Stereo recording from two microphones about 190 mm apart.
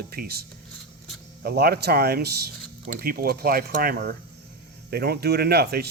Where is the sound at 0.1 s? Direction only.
55° right (ahead or behind).